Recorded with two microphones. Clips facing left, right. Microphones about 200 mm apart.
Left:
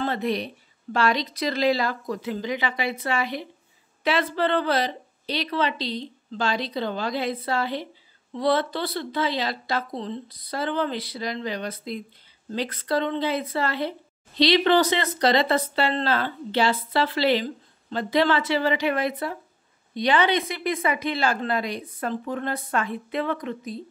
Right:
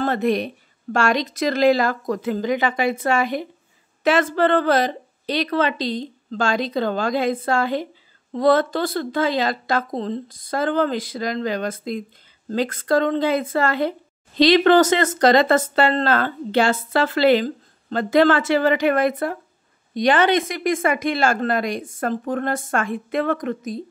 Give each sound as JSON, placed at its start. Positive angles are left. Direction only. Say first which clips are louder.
{"t": 0.0, "sound": "a woman's voice", "louder": "right 5 dB", "side_deg": -50}